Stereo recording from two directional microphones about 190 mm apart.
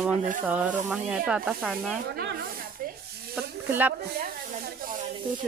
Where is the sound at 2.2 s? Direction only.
55° right (ahead or behind).